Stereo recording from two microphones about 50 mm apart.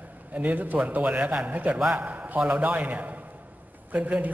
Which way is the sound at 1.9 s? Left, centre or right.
Right.